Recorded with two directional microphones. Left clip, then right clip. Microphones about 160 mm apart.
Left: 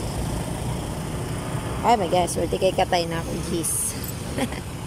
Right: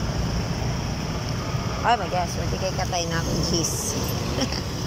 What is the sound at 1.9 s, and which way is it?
Speech, 35° left (ahead or behind).